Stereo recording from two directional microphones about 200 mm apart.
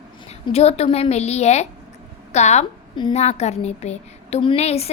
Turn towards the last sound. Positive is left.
turn(degrees=30)  # may be behind; listen again after turning